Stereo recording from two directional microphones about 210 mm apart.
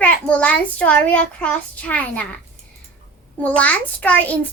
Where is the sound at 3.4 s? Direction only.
5° left (ahead or behind).